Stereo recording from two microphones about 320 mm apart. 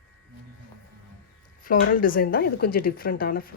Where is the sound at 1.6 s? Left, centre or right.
Left.